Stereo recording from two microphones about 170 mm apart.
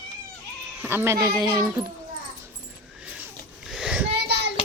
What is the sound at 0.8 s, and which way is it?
Speech, 15° right (ahead or behind).